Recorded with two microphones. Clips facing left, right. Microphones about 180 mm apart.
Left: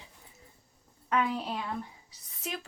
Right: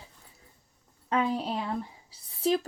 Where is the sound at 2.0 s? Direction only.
30° right (ahead or behind).